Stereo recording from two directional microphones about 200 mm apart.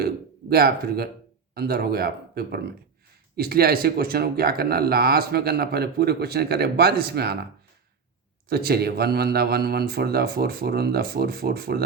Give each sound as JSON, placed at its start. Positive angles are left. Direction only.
{"t": 0.5, "sound": "speech", "side_deg": -50}
{"t": 8.4, "sound": "speech", "side_deg": -50}